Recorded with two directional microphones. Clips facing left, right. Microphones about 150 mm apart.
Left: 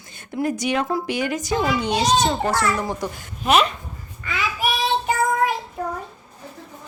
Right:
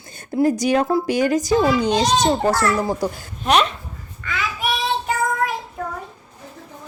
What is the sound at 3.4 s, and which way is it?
Speech, centre (ahead or behind).